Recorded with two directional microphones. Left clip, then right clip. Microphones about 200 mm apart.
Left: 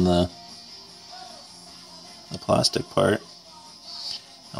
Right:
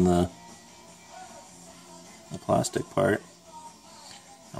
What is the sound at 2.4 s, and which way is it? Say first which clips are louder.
Speech: left 4 dB; 30° left (ahead or behind).